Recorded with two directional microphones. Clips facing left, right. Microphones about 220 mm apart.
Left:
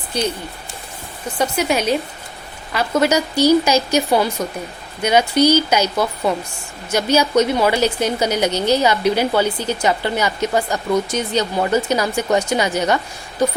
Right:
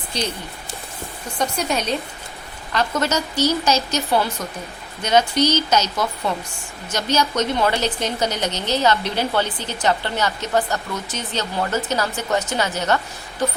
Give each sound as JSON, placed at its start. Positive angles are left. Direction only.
{"t": 1.4, "sound": "a woman's voice", "side_deg": 5}